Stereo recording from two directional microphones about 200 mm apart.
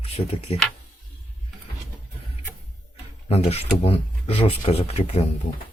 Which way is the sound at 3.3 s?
30° left (ahead or behind).